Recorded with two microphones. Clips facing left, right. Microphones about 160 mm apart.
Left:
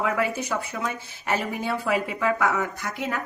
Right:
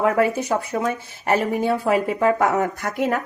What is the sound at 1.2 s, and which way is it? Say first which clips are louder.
A woman's voice: right 7 dB; 45° right (ahead or behind).